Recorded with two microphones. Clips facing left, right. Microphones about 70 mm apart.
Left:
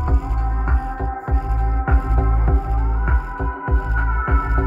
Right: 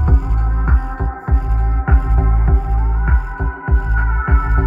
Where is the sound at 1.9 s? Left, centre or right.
Centre.